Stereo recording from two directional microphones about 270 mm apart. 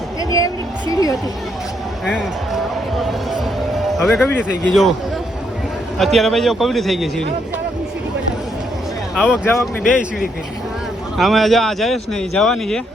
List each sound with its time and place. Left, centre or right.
0.3 s a woman's voice: centre
2.0 s speech: centre
3.9 s speech: centre
6.0 s speech: centre
9.1 s speech: centre